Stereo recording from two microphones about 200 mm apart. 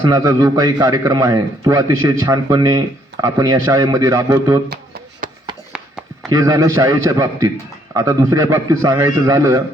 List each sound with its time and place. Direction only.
0.1 s a man's voice: 15° right (ahead or behind)
5.2 s a sound: 40° right (ahead or behind)
6.2 s a man's voice: 15° right (ahead or behind)